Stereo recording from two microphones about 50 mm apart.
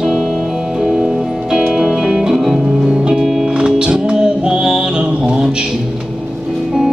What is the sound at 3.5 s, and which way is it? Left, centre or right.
Music, centre.